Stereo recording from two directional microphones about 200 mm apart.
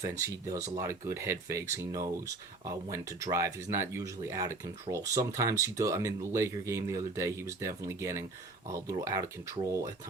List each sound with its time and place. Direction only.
0.4 s speech: 15° right (ahead or behind)